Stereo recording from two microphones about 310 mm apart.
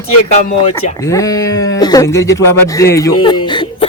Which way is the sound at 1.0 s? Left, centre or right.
Centre.